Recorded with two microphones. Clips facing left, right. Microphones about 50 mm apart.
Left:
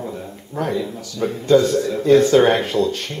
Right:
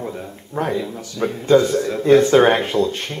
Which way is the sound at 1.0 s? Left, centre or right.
Right.